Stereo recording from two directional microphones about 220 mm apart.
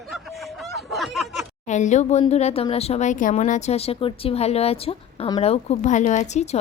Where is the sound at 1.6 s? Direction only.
35° left (ahead or behind).